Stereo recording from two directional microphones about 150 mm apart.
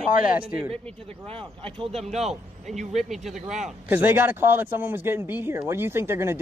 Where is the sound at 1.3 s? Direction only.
40° right (ahead or behind).